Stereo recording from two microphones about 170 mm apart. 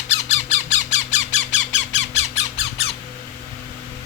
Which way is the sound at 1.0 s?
90° left.